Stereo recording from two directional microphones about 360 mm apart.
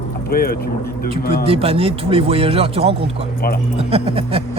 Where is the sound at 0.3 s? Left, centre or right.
Left.